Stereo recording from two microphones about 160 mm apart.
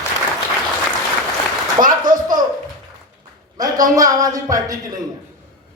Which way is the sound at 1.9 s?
25° right (ahead or behind).